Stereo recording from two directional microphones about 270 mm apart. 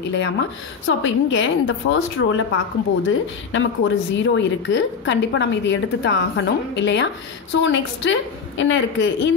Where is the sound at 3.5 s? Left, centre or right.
Left.